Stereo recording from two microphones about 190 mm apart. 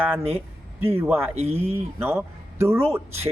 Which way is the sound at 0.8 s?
10° right (ahead or behind).